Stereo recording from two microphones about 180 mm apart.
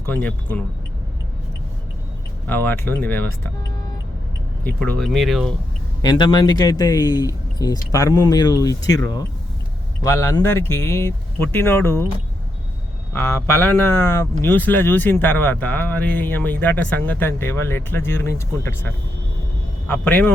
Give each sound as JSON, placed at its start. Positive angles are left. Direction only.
{"t": 0.0, "sound": "speech", "side_deg": 10}
{"t": 2.5, "sound": "speech", "side_deg": 10}
{"t": 4.6, "sound": "speech", "side_deg": 5}
{"t": 6.0, "sound": "speech", "side_deg": 25}
{"t": 13.1, "sound": "speech", "side_deg": 10}
{"t": 19.9, "sound": "speech", "side_deg": 10}